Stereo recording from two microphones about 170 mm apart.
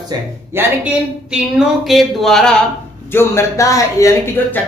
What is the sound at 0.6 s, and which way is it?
Speech, 15° right (ahead or behind).